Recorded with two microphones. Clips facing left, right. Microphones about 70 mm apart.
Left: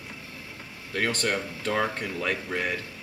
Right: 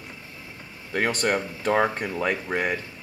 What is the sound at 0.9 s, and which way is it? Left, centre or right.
Speech, centre.